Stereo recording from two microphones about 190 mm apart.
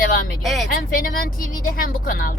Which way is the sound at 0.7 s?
45° left (ahead or behind).